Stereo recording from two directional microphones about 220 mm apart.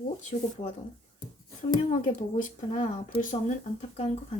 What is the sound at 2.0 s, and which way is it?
Speech, 30° left (ahead or behind).